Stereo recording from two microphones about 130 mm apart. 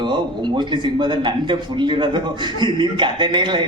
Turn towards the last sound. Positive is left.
turn(degrees=-35)  # may be behind; listen again after turning